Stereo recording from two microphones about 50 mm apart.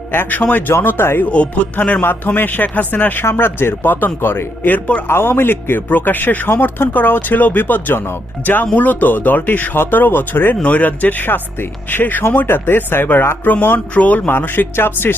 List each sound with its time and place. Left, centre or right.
0.3 s a man's voice: left
0.7 s speech: left
1.3 s speech: left
2.0 s a man's voice: left
3.3 s speech: left
4.6 s a man's voice: left
5.0 s a man's voice: left
10.6 s a man's voice: left
14.3 s speech: left